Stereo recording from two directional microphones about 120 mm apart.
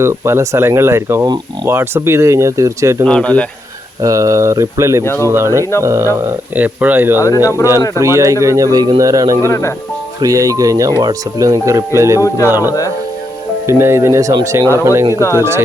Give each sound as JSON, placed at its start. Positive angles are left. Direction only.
{"t": 0.0, "sound": "speech", "side_deg": -20}
{"t": 3.1, "sound": "speech", "side_deg": 10}
{"t": 4.0, "sound": "speech", "side_deg": -25}
{"t": 5.0, "sound": "speech", "side_deg": 20}
{"t": 5.3, "sound": "speech", "side_deg": -25}
{"t": 6.6, "sound": "speech", "side_deg": -15}
{"t": 7.2, "sound": "speech", "side_deg": 25}
{"t": 7.9, "sound": "speech", "side_deg": -25}
{"t": 9.5, "sound": "speech", "side_deg": 25}
{"t": 10.2, "sound": "speech", "side_deg": -30}